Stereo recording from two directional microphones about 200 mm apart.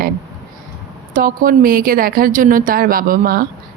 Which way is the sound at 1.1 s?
45° right (ahead or behind).